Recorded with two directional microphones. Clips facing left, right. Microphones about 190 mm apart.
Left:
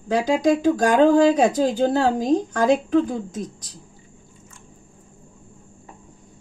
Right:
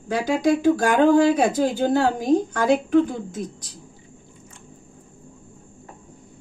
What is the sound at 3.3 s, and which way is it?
Speech, 40° left (ahead or behind).